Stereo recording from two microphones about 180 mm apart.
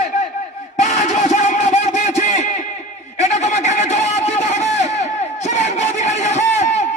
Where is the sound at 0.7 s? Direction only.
40° left (ahead or behind).